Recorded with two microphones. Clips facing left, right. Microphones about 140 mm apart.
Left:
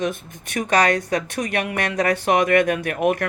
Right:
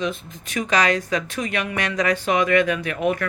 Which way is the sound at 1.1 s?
50° left (ahead or behind).